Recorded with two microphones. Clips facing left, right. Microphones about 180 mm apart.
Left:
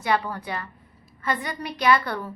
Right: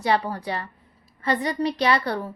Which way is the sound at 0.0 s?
35° right (ahead or behind).